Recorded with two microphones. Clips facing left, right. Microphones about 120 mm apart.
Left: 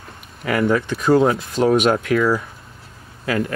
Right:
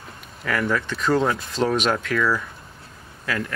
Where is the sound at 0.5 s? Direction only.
25° left (ahead or behind).